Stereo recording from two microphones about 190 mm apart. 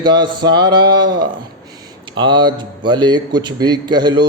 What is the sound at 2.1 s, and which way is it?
A man's voice, 25° right (ahead or behind).